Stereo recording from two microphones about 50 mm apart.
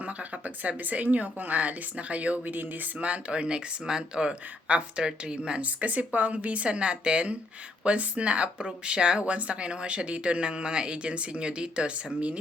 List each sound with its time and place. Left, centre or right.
0.0 s a woman's voice: right
3.1 s a woman's voice: right